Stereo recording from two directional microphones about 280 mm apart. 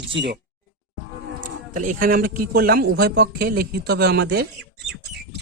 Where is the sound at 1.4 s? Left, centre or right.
Right.